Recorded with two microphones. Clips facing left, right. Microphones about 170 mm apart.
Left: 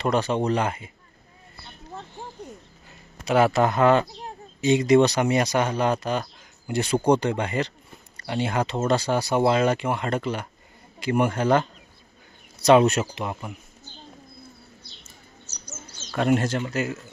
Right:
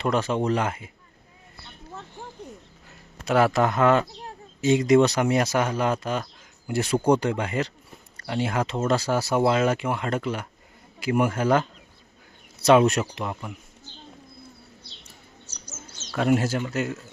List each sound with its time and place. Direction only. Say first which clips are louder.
0.0 s speech: left 1 dB; centre (ahead or behind)
2.0 s a sound: left 2 dB; 15° left (ahead or behind)
3.2 s speech: left 1 dB; centre (ahead or behind)
15.6 s bird: left 1 dB; centre (ahead or behind)
16.6 s speech: even; centre (ahead or behind)